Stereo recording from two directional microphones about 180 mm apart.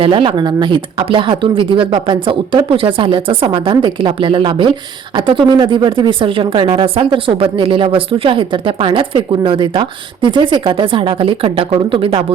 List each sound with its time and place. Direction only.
0.0 s speech: 30° right (ahead or behind)